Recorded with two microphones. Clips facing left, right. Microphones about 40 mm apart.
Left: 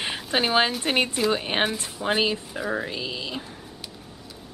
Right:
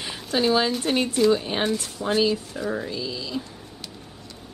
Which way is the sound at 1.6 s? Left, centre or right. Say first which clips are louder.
Even; centre.